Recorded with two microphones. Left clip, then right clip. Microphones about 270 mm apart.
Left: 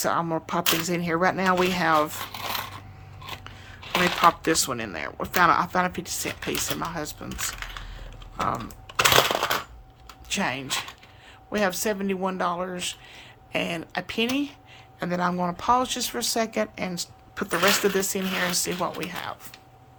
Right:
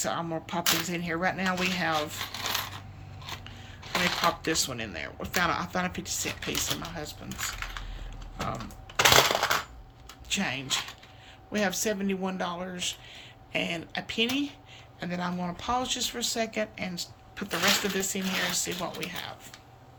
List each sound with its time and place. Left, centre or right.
0.0 s speech: centre
4.0 s speech: centre
8.4 s a sound: centre
9.1 s coin: centre
10.2 s speech: centre